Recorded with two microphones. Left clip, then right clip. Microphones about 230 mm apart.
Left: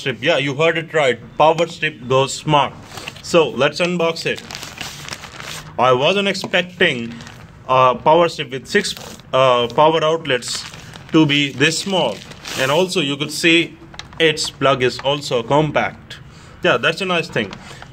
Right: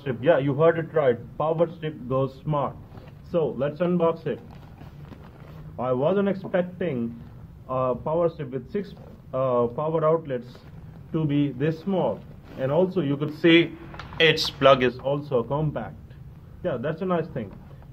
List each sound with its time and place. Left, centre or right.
0.0 s speech: left
5.8 s speech: left